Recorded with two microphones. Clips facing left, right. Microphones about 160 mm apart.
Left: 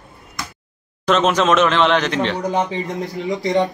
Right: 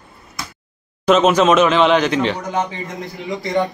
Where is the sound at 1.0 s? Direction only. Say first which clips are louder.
Right 3 dB; 5° right (ahead or behind).